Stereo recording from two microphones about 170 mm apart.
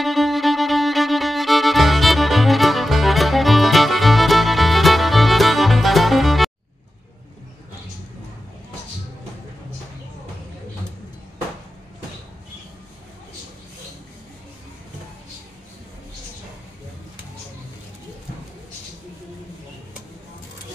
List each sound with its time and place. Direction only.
0.0 s music: centre (ahead or behind)